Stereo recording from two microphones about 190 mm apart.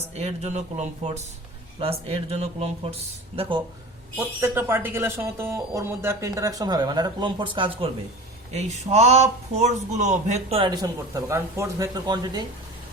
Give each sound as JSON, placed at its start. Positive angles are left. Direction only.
{"t": 0.1, "sound": "speech", "side_deg": -35}
{"t": 4.4, "sound": "speech", "side_deg": -10}